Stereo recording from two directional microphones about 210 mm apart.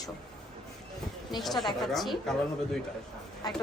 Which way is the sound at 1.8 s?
Centre (ahead or behind).